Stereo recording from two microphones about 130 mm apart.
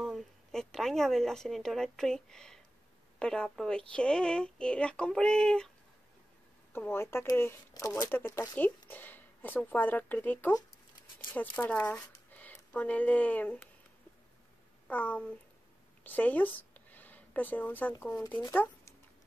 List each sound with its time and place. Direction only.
0.0 s speech: centre (ahead or behind)
6.7 s speech: 15° left (ahead or behind)
14.9 s speech: 10° left (ahead or behind)
18.5 s a sound: 15° left (ahead or behind)